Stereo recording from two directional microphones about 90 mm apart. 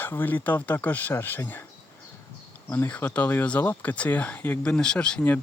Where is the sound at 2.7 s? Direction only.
20° left (ahead or behind).